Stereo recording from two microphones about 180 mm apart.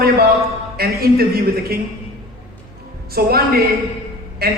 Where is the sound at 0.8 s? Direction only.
60° right (ahead or behind).